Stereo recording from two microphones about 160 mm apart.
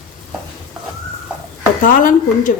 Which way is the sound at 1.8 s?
55° left (ahead or behind).